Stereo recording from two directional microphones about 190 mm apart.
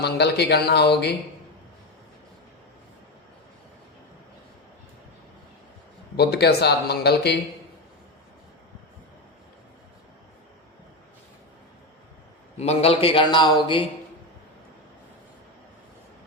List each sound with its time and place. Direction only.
0.0 s speech: 60° left (ahead or behind)
6.1 s speech: 60° left (ahead or behind)
12.5 s a man's voice: 30° left (ahead or behind)